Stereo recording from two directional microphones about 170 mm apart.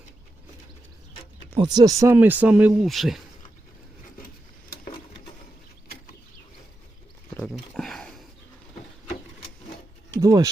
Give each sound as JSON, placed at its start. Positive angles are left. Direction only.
{"t": 1.5, "sound": "speech", "side_deg": -25}
{"t": 7.3, "sound": "a sound", "side_deg": 5}
{"t": 10.2, "sound": "speech", "side_deg": -20}